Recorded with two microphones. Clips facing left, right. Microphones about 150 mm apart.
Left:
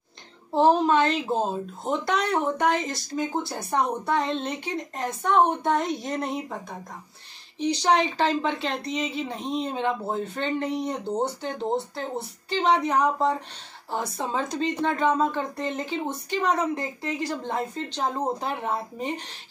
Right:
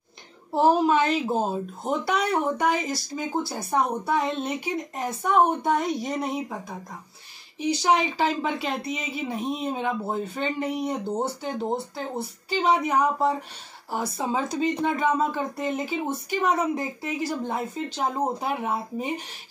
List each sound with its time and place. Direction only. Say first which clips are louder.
0.6 s speech: even; 5° right (ahead or behind)